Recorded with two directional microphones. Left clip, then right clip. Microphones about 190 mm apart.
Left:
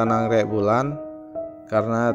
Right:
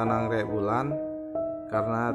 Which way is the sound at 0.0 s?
25° left (ahead or behind).